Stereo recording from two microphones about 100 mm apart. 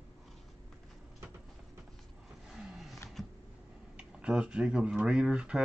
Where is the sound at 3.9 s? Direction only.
10° right (ahead or behind).